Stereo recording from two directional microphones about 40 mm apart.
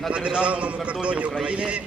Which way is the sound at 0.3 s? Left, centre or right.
Right.